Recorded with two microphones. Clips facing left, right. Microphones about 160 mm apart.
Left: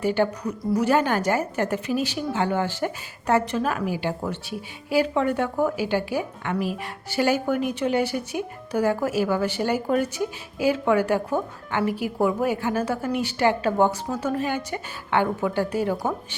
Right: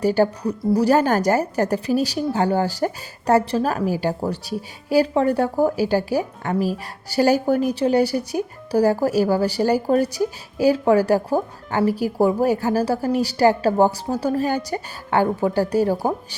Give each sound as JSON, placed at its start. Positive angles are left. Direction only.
{"t": 0.0, "sound": "a woman's voice", "side_deg": -40}